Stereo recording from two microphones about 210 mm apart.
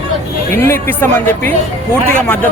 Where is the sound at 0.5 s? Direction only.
10° left (ahead or behind).